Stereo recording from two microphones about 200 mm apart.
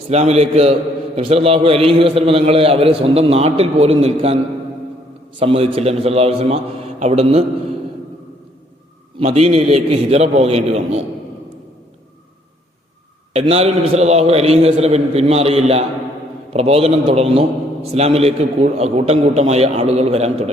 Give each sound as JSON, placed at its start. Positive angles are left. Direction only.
{"t": 0.1, "sound": "a man's voice", "side_deg": -35}
{"t": 5.4, "sound": "a man's voice", "side_deg": -30}
{"t": 9.1, "sound": "a man's voice", "side_deg": -30}
{"t": 13.3, "sound": "a man's voice", "side_deg": -30}